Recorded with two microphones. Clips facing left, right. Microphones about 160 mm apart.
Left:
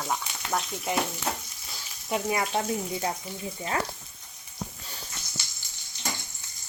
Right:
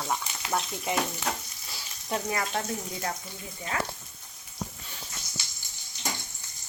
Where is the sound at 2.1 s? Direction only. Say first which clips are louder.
Left 3 dB; 15° left (ahead or behind).